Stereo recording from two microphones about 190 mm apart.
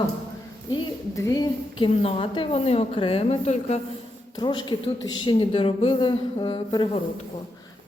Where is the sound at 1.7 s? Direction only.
30° left (ahead or behind).